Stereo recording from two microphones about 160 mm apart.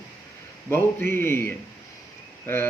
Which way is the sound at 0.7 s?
15° left (ahead or behind).